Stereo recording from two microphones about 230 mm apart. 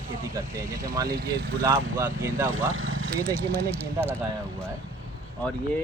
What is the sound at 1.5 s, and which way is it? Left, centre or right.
Speech, centre.